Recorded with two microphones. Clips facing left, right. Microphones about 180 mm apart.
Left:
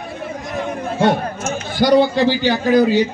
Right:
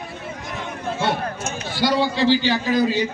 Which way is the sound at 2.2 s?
15° left (ahead or behind).